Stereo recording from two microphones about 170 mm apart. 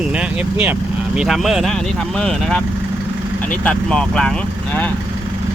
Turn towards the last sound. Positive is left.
turn(degrees=5)  # may be behind; listen again after turning